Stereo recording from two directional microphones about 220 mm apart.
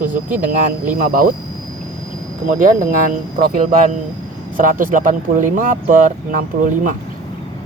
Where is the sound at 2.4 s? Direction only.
35° right (ahead or behind).